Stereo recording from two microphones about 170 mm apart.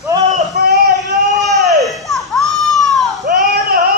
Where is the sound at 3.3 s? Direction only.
75° right (ahead or behind).